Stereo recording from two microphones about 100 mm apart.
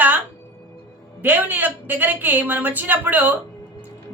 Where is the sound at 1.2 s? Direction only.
20° right (ahead or behind).